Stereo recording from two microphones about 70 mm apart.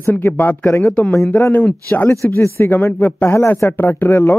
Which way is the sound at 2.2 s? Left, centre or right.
Left.